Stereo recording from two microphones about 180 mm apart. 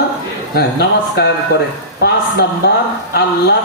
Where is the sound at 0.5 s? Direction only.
65° left (ahead or behind).